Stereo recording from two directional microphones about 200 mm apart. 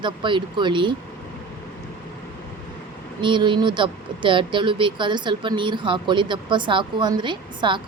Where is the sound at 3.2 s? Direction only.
25° right (ahead or behind).